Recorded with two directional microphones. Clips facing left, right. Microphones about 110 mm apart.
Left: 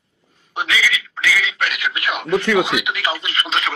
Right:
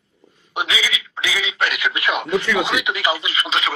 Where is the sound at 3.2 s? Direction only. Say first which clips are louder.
Even; centre (ahead or behind).